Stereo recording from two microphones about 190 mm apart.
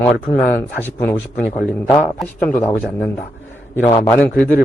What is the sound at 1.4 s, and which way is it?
Speech, 40° left (ahead or behind).